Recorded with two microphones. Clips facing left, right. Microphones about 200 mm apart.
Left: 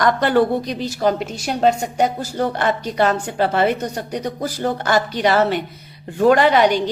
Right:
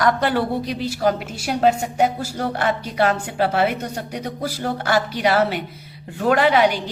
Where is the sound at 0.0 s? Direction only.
5° right (ahead or behind).